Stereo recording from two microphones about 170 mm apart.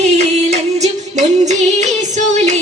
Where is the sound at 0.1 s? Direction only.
40° right (ahead or behind).